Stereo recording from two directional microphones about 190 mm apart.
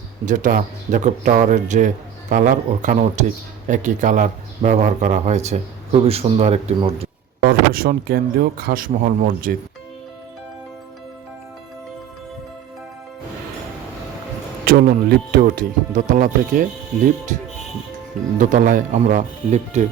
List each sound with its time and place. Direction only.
0.3 s speech: 40° right (ahead or behind)
7.4 s speech: 50° right (ahead or behind)
14.6 s speech: 55° right (ahead or behind)
18.3 s speech: 40° right (ahead or behind)